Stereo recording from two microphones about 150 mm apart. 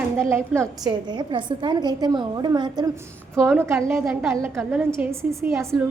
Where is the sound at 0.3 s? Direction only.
20° right (ahead or behind).